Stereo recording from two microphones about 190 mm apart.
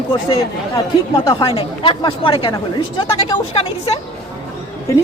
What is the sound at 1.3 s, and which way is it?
A woman's voice, 30° left (ahead or behind).